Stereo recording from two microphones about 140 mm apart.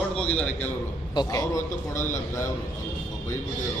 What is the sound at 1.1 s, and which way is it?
Speech, 25° left (ahead or behind).